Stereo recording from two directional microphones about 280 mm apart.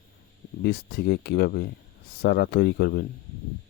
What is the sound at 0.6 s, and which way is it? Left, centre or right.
Speech, left.